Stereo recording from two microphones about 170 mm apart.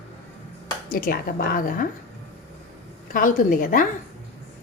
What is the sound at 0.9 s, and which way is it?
Speech, 55° left (ahead or behind).